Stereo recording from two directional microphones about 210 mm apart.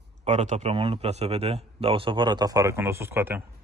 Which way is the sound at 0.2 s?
35° right (ahead or behind).